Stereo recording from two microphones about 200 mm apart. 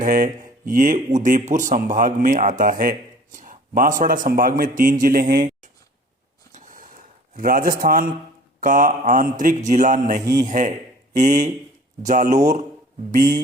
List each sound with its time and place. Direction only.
0.0 s a man's voice: 40° right (ahead or behind)
6.5 s a sound: 40° right (ahead or behind)
7.3 s a man's voice: 45° right (ahead or behind)